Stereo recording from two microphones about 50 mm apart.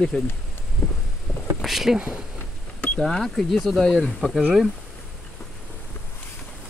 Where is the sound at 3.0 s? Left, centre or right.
Centre.